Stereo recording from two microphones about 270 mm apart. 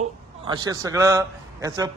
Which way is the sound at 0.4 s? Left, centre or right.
Centre.